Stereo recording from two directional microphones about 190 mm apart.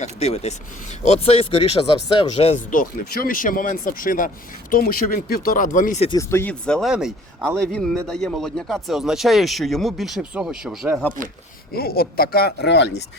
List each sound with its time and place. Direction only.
0.0 s speech: 35° left (ahead or behind)
6.1 s speech: 15° left (ahead or behind); by 11.0 s 5° right (ahead or behind)
11.7 s speech: 55° left (ahead or behind)